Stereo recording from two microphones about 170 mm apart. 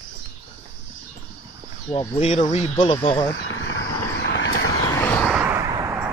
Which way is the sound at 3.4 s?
90° left.